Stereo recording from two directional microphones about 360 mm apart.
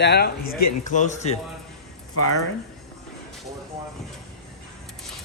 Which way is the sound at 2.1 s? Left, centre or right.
Left.